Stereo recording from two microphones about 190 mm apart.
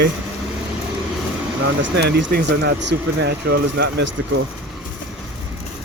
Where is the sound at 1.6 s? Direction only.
65° right (ahead or behind).